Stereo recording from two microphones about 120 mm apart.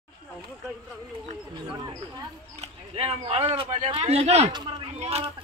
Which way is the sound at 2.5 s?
60° right (ahead or behind).